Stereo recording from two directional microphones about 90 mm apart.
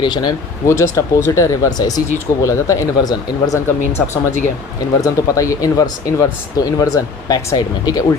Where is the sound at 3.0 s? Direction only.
45° left (ahead or behind).